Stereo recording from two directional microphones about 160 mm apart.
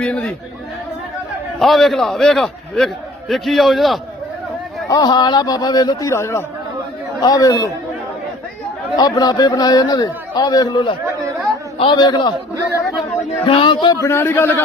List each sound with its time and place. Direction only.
0.0 s speech: 5° left (ahead or behind)
1.5 s a man's voice: centre (ahead or behind)
4.9 s a man's voice: 25° left (ahead or behind)
9.0 s a man's voice: 25° left (ahead or behind)
13.4 s a man's voice: 35° left (ahead or behind); by 14.5 s 15° left (ahead or behind)